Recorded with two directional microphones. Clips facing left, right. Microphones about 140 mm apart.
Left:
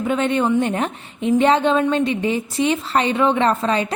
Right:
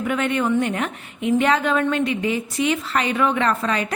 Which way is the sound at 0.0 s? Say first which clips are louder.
Left 3 dB; 25° left (ahead or behind).